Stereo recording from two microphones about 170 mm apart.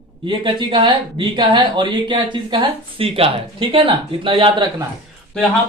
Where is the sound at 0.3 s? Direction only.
30° right (ahead or behind).